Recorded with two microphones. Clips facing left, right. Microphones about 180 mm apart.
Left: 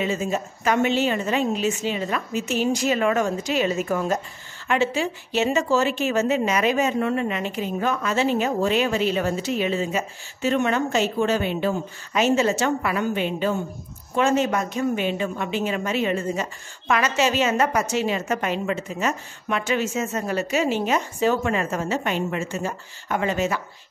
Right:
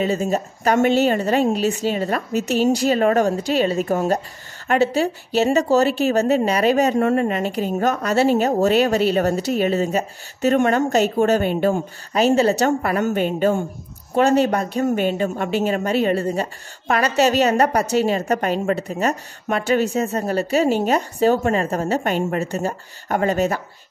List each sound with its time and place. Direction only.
0.0 s speech: 40° right (ahead or behind)
14.1 s speech: 35° right (ahead or behind)